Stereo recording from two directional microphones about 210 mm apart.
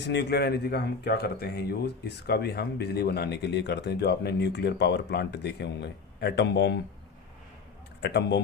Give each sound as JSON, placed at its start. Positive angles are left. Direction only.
{"t": 0.0, "sound": "speech", "side_deg": 55}
{"t": 8.0, "sound": "speech", "side_deg": 55}